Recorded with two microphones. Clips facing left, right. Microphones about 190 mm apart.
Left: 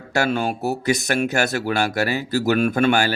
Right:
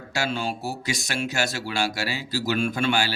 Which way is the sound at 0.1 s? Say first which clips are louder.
Left 6 dB; 60° left (ahead or behind).